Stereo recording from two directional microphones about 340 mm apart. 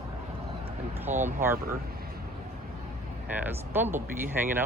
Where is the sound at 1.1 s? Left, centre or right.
Right.